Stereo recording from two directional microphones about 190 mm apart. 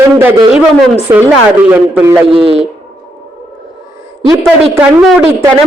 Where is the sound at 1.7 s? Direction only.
10° right (ahead or behind).